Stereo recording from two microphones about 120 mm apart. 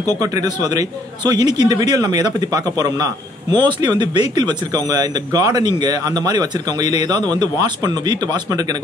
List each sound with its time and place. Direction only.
0.2 s speech: 30° right (ahead or behind)